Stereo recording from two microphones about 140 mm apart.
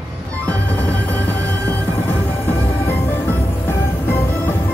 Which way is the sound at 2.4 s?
15° left (ahead or behind).